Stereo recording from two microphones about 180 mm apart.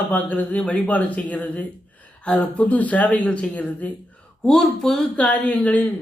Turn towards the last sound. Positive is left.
turn(degrees=10)  # may be behind; listen again after turning